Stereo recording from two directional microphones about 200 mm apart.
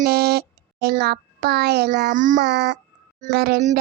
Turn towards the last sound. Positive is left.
turn(degrees=-45)  # may be behind; listen again after turning